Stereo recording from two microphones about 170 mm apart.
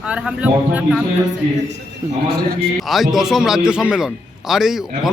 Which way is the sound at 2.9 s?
Centre (ahead or behind).